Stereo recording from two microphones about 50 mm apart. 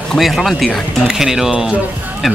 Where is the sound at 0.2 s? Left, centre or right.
Centre.